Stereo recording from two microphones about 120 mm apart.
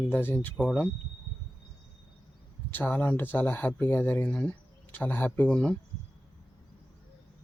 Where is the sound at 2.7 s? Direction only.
15° left (ahead or behind).